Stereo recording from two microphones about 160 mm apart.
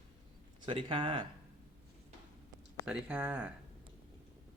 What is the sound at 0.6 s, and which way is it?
Speech, 30° right (ahead or behind).